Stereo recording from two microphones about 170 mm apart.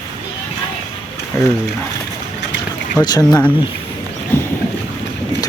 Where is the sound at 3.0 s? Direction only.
25° left (ahead or behind).